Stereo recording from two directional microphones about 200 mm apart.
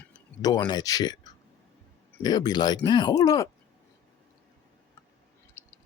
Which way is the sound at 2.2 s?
20° left (ahead or behind).